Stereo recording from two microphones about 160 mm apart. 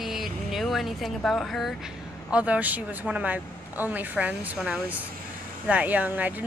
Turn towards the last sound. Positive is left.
turn(degrees=-10)  # may be behind; listen again after turning